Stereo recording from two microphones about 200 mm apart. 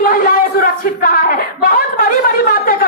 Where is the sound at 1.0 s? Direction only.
45° left (ahead or behind).